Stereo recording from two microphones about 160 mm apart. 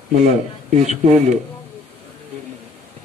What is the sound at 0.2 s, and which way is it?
Speech, 45° right (ahead or behind).